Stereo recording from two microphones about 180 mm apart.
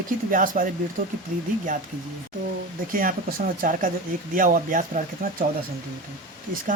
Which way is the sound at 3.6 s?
50° right (ahead or behind).